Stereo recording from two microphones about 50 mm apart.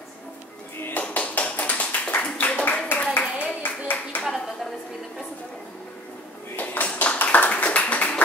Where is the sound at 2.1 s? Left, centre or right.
Left.